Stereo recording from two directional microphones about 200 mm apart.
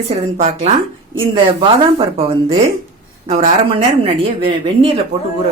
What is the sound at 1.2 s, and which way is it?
Speech, 25° right (ahead or behind).